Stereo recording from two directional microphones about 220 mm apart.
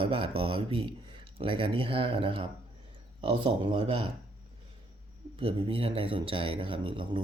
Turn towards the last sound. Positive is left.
turn(degrees=-20)  # may be behind; listen again after turning